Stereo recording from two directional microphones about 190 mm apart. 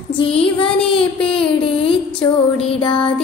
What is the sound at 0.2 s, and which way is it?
Music, 30° left (ahead or behind).